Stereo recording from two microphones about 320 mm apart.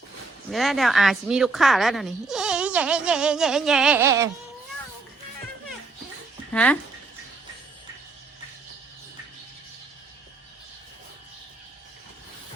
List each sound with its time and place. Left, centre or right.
0.5 s a woman's voice: centre
6.5 s speech: centre